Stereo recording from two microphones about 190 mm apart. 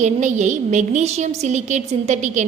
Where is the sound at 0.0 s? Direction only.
40° right (ahead or behind).